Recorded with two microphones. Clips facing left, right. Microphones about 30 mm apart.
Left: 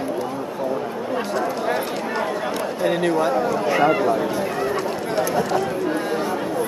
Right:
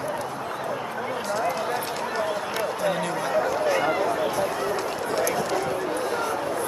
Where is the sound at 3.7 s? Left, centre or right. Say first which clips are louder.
Left 5 dB; centre.